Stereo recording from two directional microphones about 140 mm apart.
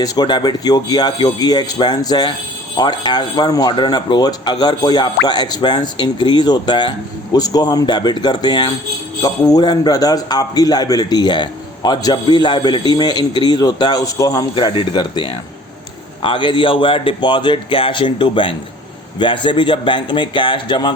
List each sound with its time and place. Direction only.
0.0 s a man's voice: 30° left (ahead or behind)